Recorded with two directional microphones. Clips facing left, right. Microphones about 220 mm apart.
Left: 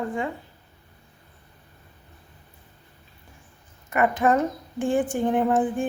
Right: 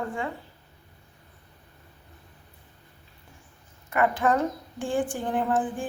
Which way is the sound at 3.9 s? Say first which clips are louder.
Left 2 dB; 20° left (ahead or behind).